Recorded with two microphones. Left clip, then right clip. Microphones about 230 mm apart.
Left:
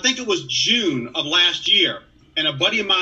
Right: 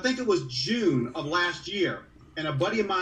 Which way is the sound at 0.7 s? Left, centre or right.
Left.